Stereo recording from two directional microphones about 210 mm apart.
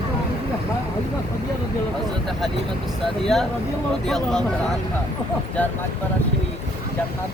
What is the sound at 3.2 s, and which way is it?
Speech, centre (ahead or behind).